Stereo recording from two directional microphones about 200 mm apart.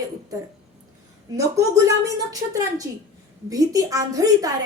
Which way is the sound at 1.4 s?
15° right (ahead or behind).